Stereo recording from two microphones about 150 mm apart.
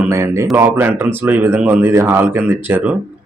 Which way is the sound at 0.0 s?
20° right (ahead or behind).